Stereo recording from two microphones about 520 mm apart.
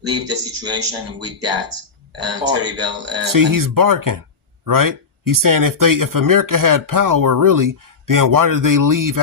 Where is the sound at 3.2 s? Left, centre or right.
Right.